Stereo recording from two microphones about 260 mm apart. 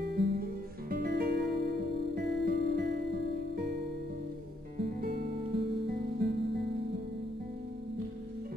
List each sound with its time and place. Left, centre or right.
0.2 s music: right
5.9 s music: right